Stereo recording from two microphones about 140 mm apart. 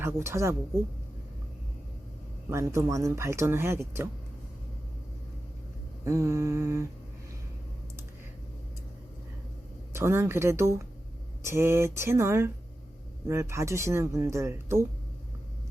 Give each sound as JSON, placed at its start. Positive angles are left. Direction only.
{"t": 0.0, "sound": "speech", "side_deg": -20}
{"t": 2.5, "sound": "speech", "side_deg": -20}
{"t": 6.1, "sound": "speech", "side_deg": -20}
{"t": 9.9, "sound": "speech", "side_deg": -20}